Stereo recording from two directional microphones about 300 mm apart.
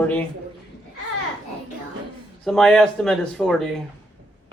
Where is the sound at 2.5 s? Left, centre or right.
Centre.